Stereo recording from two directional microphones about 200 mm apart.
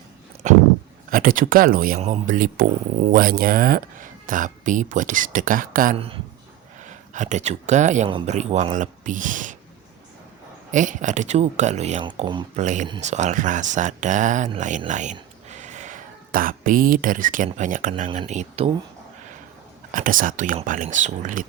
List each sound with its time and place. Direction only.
0.4 s speech: 35° right (ahead or behind)
2.0 s speech: 35° right (ahead or behind)
10.7 s speech: 40° right (ahead or behind)
12.0 s speech: 25° right (ahead or behind)
12.5 s speech: 40° right (ahead or behind)
19.9 s speech: 45° right (ahead or behind)